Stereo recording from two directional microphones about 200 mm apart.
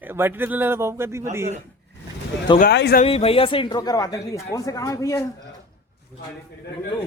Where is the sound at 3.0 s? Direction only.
30° left (ahead or behind).